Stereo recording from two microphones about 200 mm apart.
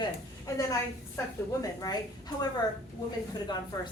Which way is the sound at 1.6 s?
15° left (ahead or behind).